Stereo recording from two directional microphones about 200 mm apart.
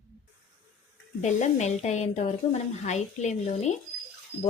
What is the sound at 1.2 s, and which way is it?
Speech, 35° left (ahead or behind).